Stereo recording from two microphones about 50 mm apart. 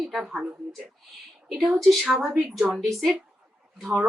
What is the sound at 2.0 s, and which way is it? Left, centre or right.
Speech, centre.